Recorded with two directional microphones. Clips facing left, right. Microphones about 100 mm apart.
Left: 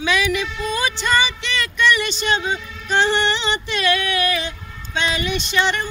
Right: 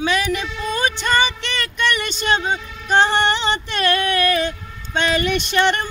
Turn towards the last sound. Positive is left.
turn(degrees=-55)  # may be behind; listen again after turning